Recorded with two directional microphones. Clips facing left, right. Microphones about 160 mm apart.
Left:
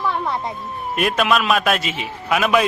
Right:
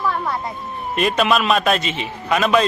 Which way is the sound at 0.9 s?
5° left (ahead or behind).